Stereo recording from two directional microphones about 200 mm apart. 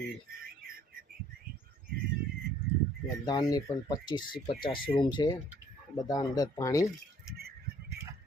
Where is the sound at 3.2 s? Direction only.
20° left (ahead or behind).